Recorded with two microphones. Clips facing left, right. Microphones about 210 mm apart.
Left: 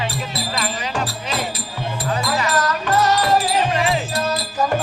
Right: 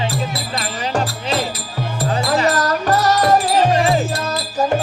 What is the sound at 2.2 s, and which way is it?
Music, 35° right (ahead or behind).